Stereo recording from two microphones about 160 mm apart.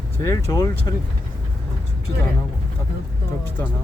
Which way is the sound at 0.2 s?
20° left (ahead or behind).